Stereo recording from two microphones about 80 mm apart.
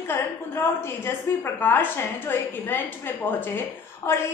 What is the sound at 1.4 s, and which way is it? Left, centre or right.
A woman's voice, left.